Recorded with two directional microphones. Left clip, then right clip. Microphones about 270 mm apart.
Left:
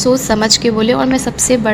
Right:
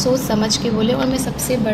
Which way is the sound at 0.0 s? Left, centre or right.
Left.